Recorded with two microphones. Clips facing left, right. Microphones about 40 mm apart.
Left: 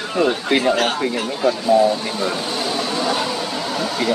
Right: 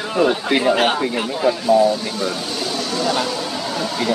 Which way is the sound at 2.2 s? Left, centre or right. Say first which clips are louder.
Left 1 dB; centre.